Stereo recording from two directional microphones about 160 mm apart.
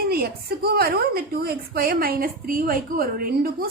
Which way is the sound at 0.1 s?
75° right (ahead or behind).